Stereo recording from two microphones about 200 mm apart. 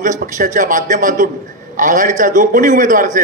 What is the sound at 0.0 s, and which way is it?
A man's voice, 40° right (ahead or behind).